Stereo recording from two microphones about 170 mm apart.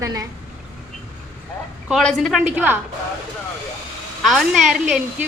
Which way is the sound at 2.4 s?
10° right (ahead or behind).